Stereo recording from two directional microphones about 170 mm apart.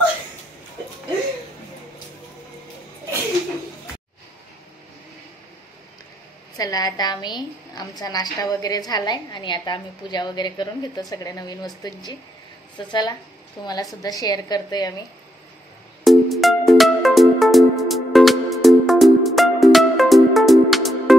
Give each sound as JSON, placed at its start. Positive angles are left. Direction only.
{"t": 6.5, "sound": "a woman's voice", "side_deg": 20}
{"t": 16.0, "sound": "music", "side_deg": 0}